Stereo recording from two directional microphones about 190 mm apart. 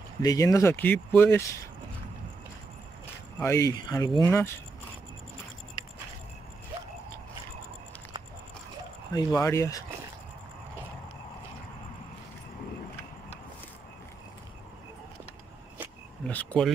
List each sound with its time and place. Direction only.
0.2 s speech: 20° left (ahead or behind)
3.3 s speech: 15° left (ahead or behind)
9.1 s speech: 15° left (ahead or behind)
16.3 s speech: 5° left (ahead or behind)